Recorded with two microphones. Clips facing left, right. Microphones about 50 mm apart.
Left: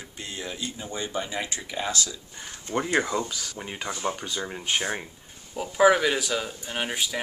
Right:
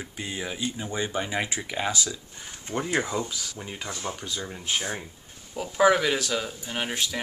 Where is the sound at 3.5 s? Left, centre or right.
Centre.